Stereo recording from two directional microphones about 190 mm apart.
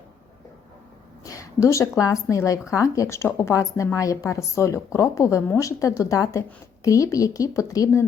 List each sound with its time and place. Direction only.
1.2 s a woman's voice: 15° left (ahead or behind)